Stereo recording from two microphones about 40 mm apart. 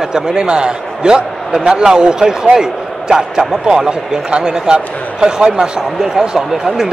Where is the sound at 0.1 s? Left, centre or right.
Centre.